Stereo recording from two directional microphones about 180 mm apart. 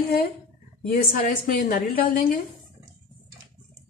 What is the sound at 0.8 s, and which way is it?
A woman's voice, 50° left (ahead or behind).